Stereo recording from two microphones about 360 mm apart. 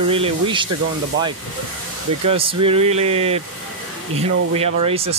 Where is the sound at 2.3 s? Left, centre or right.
Centre.